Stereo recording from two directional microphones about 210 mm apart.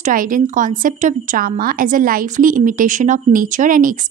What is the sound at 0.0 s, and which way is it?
A woman's voice, 40° right (ahead or behind).